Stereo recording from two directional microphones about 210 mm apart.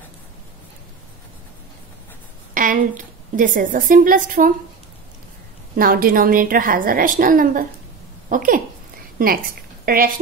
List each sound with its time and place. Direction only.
2.5 s a woman's voice: 40° right (ahead or behind)
5.8 s a woman's voice: 45° right (ahead or behind)